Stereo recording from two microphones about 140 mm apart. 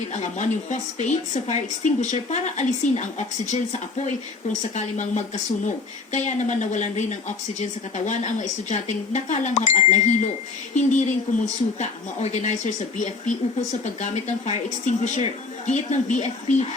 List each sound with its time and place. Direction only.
0.1 s speech: 60° left (ahead or behind)